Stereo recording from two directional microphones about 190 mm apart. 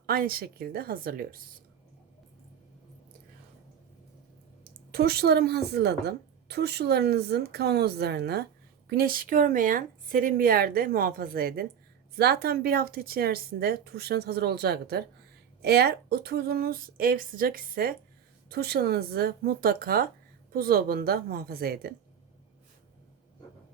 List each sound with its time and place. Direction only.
0.0 s speech: 50° right (ahead or behind)
4.9 s a woman's voice: 55° right (ahead or behind)